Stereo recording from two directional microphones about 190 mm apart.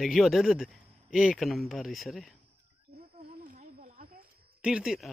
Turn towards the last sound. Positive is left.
turn(degrees=0)  # may be behind; listen again after turning